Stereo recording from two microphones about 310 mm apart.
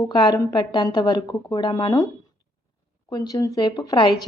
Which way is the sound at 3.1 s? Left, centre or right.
Centre.